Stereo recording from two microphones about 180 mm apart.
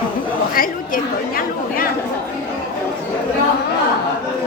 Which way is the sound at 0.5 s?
50° left (ahead or behind).